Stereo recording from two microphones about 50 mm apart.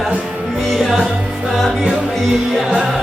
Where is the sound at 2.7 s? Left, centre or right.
Centre.